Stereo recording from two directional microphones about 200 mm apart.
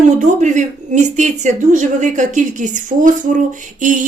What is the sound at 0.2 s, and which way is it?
A woman's voice, 35° right (ahead or behind).